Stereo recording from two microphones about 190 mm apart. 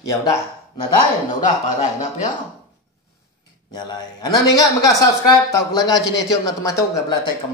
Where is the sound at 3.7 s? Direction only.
20° left (ahead or behind).